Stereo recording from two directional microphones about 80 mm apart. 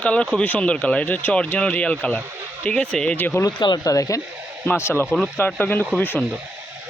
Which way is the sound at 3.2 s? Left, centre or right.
Left.